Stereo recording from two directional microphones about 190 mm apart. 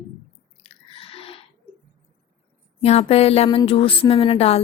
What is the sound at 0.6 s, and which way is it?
Squish, 30° left (ahead or behind).